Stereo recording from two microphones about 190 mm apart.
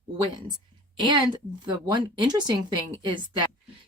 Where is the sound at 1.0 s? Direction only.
25° right (ahead or behind).